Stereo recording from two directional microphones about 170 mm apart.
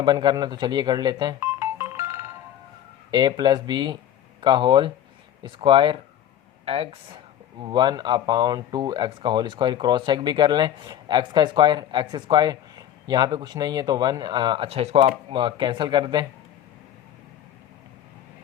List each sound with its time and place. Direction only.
0.0 s speech: 25° right (ahead or behind)
7.6 s speech: 25° right (ahead or behind)